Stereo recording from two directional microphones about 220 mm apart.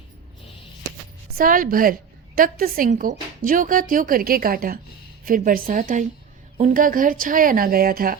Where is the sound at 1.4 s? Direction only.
40° right (ahead or behind).